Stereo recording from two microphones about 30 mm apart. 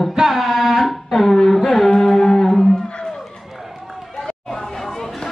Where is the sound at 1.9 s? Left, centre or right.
Centre.